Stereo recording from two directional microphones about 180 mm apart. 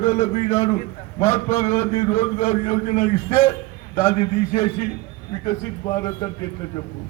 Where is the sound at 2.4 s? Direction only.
40° left (ahead or behind).